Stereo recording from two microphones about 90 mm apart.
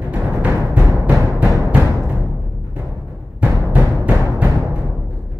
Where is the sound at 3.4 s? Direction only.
15° right (ahead or behind).